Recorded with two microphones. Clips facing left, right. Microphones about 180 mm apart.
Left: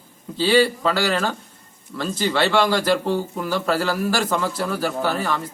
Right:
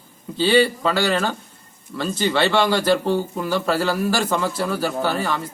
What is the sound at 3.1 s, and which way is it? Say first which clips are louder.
Speech: right 2 dB; 25° right (ahead or behind).